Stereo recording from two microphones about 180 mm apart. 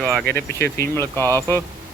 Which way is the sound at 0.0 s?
Centre (ahead or behind).